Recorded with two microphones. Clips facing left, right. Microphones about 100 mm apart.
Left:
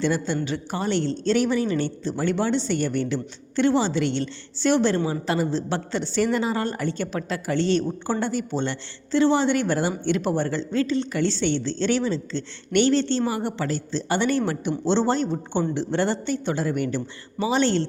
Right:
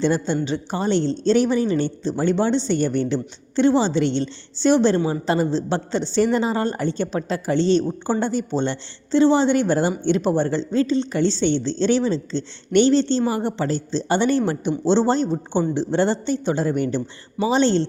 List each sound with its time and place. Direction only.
0.0 s a woman's voice: 25° right (ahead or behind)